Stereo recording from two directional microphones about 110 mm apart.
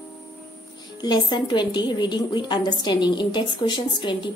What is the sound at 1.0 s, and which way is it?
A woman's voice, 40° left (ahead or behind).